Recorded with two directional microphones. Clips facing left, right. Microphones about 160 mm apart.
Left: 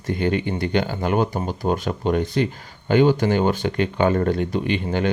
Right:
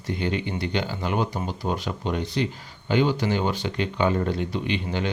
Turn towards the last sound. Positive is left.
turn(degrees=50)  # may be behind; listen again after turning